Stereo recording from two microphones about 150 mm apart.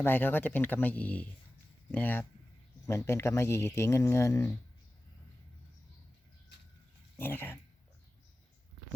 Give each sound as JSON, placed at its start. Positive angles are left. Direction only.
{"t": 0.0, "sound": "speech", "side_deg": 15}
{"t": 7.2, "sound": "speech", "side_deg": 15}